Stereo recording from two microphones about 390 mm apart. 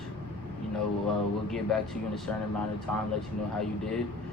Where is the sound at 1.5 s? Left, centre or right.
Centre.